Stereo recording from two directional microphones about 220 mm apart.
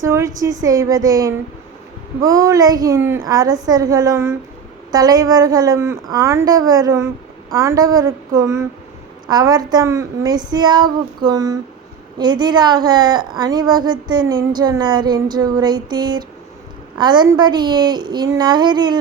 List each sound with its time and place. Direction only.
0.0 s a woman's voice: 15° right (ahead or behind)